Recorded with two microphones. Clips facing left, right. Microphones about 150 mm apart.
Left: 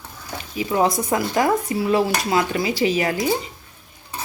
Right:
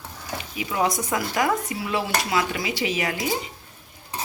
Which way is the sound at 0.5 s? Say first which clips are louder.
Left 5 dB; 35° left (ahead or behind).